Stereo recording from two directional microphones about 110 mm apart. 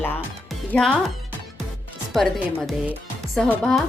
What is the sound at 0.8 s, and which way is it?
Music, centre (ahead or behind).